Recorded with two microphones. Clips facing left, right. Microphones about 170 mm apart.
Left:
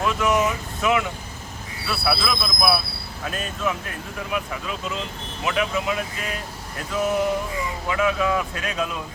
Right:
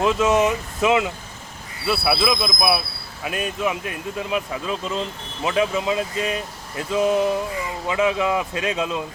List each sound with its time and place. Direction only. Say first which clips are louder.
0.0 s speech: right 3 dB; 25° right (ahead or behind)